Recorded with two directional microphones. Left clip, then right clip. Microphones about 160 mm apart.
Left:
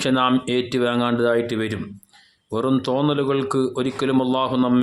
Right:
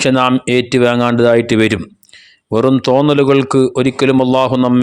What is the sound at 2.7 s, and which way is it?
Speech, 40° right (ahead or behind).